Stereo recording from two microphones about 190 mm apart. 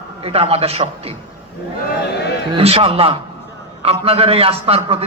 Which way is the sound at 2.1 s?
60° left (ahead or behind).